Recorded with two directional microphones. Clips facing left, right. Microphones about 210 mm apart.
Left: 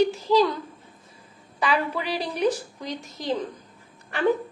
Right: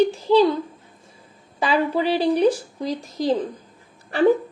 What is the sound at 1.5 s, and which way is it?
A woman's voice, 30° right (ahead or behind).